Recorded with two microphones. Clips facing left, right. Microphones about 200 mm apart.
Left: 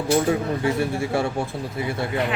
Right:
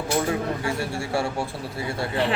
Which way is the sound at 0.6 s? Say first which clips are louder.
Left 5 dB; 20° left (ahead or behind).